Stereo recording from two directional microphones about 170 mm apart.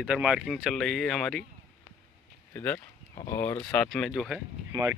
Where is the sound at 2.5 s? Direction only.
10° left (ahead or behind).